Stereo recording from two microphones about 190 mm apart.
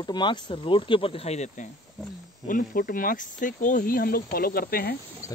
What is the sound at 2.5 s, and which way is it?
Speech, 45° left (ahead or behind).